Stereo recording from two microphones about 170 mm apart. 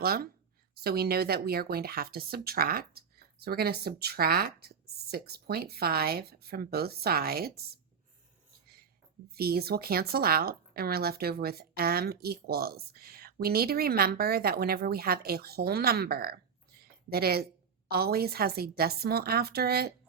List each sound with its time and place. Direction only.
0.0 s a woman's voice: 60° right (ahead or behind)
9.3 s a woman's voice: 65° right (ahead or behind)
16.8 s a sound: 65° right (ahead or behind)
17.8 s a woman's voice: 65° right (ahead or behind)